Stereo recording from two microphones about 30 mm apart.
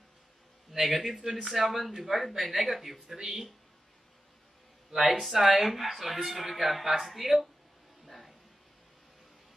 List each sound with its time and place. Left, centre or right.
0.7 s a man's voice: centre
3.2 s speech: right
5.2 s speech: centre
8.0 s a sound: centre